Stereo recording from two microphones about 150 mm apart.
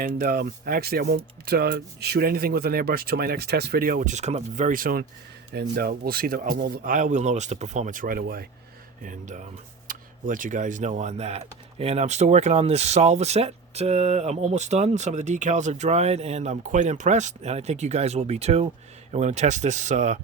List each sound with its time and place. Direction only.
0.0 s speech: 85° right
5.5 s speech: 90° right
5.9 s speech: 75° right (ahead or behind)
9.0 s speech: 55° right (ahead or behind)